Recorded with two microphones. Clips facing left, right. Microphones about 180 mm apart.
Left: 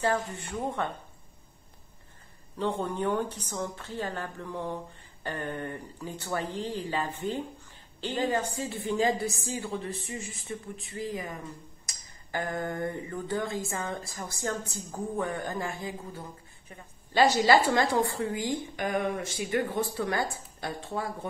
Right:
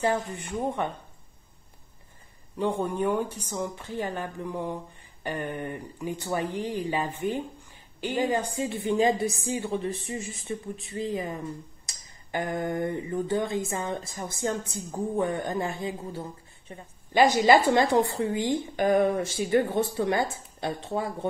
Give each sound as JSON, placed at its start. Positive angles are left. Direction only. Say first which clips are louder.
{"t": 0.0, "sound": "a woman's voice", "louder": "right 2 dB", "side_deg": -15}
{"t": 2.5, "sound": "a woman's voice", "louder": "right 3 dB", "side_deg": -10}
{"t": 17.1, "sound": "a woman's voice", "louder": "right 3 dB", "side_deg": -15}